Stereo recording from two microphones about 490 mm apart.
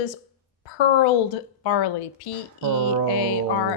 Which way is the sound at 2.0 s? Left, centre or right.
Left.